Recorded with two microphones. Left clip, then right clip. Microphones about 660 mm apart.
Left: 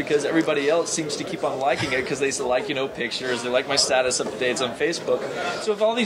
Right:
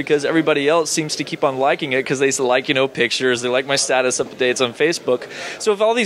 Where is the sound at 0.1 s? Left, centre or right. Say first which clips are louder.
Right 5 dB; right.